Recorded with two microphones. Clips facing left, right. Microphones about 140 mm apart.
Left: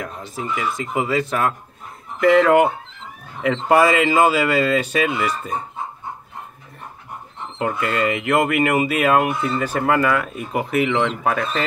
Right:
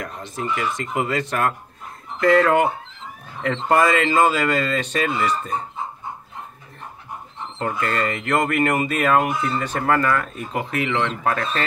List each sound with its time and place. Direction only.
0.0 s speech: 5° left (ahead or behind)
7.5 s speech: 10° left (ahead or behind)